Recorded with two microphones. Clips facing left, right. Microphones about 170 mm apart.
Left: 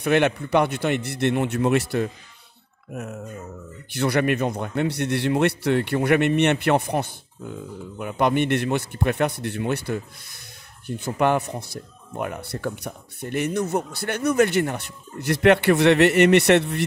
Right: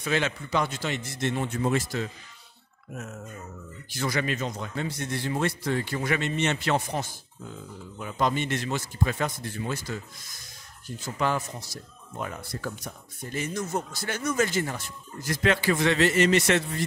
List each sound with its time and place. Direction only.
0.0 s a man's voice: 60° left (ahead or behind)
3.9 s a man's voice: 65° left (ahead or behind)